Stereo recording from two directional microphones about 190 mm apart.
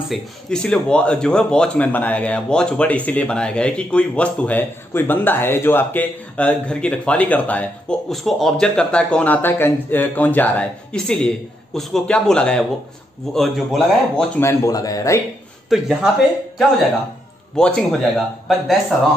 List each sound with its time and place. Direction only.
0.1 s speech: 5° left (ahead or behind)
14.4 s speech: 15° left (ahead or behind)
15.7 s speech: centre (ahead or behind)
17.6 s speech: 5° left (ahead or behind)